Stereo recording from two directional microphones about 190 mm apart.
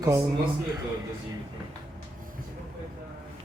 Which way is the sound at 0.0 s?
20° right (ahead or behind).